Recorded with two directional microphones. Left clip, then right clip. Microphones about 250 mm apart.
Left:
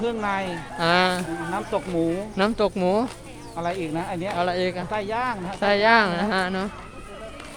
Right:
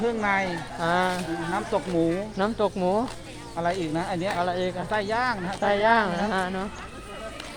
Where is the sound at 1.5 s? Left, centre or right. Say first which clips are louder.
Even; centre.